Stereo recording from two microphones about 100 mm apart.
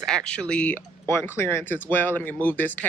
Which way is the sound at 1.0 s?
25° left (ahead or behind).